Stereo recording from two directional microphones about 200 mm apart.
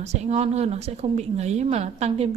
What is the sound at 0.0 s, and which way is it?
A woman's voice, 35° right (ahead or behind).